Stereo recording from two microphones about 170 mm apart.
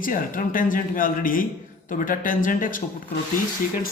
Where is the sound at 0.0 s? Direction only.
55° left (ahead or behind).